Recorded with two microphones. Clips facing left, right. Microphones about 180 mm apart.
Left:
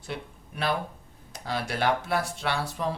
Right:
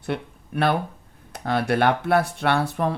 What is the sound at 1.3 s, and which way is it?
Speech, 60° right (ahead or behind).